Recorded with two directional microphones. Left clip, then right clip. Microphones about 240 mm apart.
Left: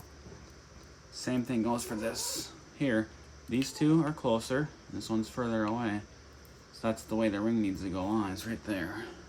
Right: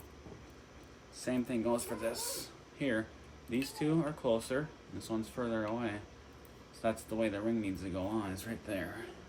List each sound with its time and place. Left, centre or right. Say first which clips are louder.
1.2 s speech: left 2 dB; left